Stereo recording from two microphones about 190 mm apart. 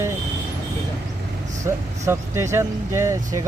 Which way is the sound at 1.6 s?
15° right (ahead or behind).